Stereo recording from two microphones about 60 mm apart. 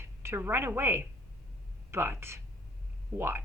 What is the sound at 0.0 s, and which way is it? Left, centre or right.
A woman's voice, right.